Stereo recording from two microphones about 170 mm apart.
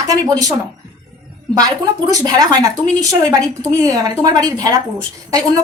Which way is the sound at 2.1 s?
20° right (ahead or behind).